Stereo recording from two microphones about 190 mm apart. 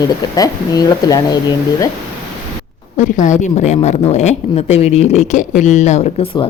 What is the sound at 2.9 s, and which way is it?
A woman's voice, 40° left (ahead or behind).